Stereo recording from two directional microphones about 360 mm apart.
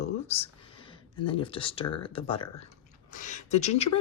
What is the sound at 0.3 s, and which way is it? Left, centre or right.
Speech, centre.